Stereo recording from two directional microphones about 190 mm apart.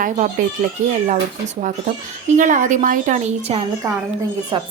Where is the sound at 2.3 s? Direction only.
40° right (ahead or behind).